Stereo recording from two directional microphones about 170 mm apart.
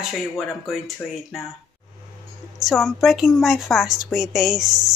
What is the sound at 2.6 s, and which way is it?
Speech, centre (ahead or behind).